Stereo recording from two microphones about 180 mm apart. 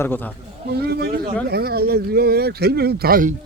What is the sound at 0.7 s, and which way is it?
Speech, 65° right (ahead or behind).